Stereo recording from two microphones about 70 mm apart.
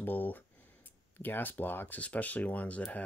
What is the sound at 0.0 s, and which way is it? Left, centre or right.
Speech, left.